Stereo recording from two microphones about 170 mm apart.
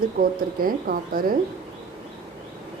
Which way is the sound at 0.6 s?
55° right (ahead or behind).